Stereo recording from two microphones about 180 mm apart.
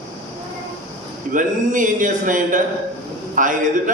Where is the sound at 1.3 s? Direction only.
45° right (ahead or behind).